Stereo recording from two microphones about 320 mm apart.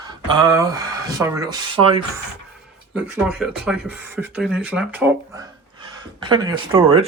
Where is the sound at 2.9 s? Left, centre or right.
Centre.